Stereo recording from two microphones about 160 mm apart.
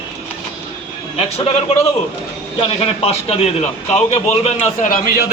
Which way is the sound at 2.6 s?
40° left (ahead or behind).